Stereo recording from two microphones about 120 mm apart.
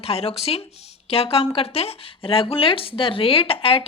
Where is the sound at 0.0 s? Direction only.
55° left (ahead or behind).